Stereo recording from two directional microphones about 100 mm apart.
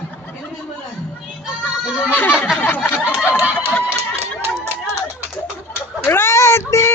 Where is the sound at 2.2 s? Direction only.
20° left (ahead or behind).